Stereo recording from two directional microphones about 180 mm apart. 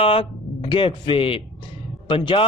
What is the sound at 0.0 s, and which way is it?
Speech, 30° left (ahead or behind).